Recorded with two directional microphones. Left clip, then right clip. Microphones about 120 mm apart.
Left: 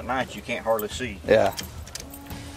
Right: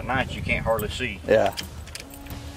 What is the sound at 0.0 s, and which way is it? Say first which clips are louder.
Speech: right 1 dB; 5° left (ahead or behind).